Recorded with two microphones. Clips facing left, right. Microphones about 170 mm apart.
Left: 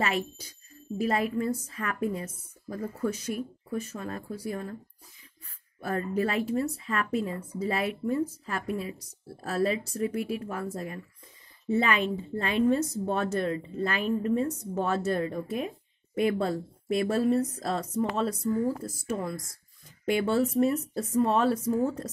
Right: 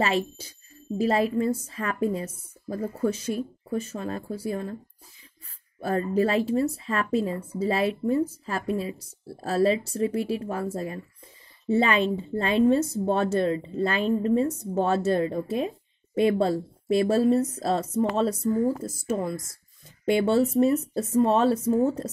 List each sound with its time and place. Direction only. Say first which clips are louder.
0.0 s speech: right 4 dB; 30° right (ahead or behind)
5.8 s speech: right 5 dB; 30° right (ahead or behind)